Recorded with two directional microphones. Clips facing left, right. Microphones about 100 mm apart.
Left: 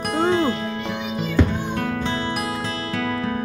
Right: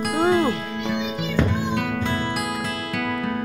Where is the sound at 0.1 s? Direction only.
15° right (ahead or behind).